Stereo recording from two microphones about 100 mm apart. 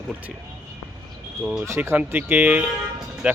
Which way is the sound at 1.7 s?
25° right (ahead or behind).